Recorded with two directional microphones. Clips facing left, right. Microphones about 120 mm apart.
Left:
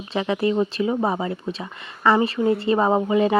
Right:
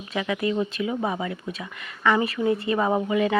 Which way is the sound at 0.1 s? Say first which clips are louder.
Left 4 dB; 30° left (ahead or behind).